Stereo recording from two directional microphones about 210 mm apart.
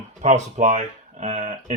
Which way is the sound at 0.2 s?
35° right (ahead or behind).